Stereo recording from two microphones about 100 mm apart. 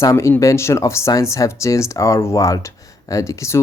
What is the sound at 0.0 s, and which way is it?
Speech, 30° left (ahead or behind).